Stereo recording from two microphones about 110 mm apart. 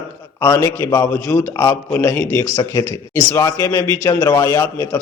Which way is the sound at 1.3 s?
15° left (ahead or behind).